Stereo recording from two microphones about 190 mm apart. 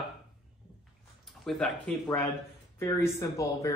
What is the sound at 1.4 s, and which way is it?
Speech, 5° left (ahead or behind).